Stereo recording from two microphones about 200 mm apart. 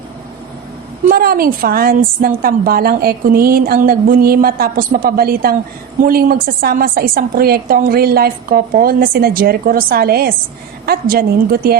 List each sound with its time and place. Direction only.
1.0 s a woman's voice: 50° right (ahead or behind)